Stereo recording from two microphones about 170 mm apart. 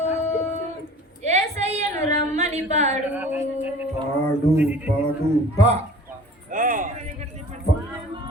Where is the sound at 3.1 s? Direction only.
10° right (ahead or behind).